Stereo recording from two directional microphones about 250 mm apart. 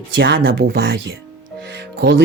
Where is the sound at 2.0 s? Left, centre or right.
Right.